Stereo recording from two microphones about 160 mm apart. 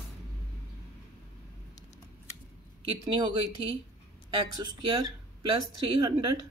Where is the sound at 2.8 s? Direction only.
30° right (ahead or behind).